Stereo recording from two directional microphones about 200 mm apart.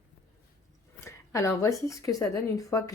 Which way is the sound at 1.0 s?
15° left (ahead or behind).